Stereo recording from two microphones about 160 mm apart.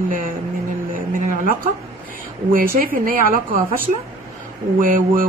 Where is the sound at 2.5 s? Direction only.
60° right (ahead or behind).